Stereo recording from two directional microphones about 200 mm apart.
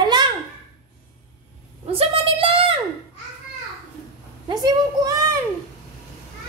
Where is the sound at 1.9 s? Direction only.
30° right (ahead or behind).